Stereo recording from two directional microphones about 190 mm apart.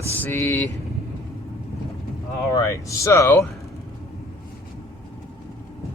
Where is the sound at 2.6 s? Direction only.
15° left (ahead or behind).